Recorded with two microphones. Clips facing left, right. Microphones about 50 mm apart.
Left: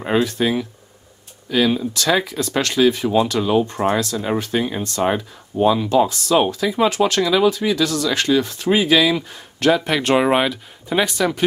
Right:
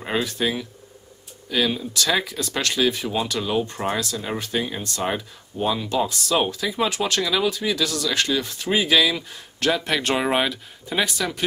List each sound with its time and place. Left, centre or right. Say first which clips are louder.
0.2 s speech: left 5 dB; centre
3.4 s speech: left 6 dB; centre
3.9 s speech: left 6 dB; centre
4.5 s speech: left 5 dB; centre